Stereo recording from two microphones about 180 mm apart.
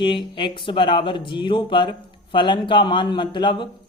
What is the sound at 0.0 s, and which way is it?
Speech, 25° left (ahead or behind).